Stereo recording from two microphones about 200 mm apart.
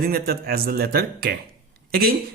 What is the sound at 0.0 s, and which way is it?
Speech, 50° right (ahead or behind).